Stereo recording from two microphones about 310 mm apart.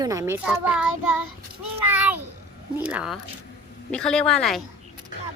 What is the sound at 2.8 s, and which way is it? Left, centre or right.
A man's voice, centre.